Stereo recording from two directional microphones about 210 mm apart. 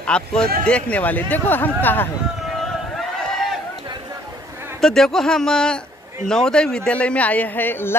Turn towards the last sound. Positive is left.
turn(degrees=10)  # may be behind; listen again after turning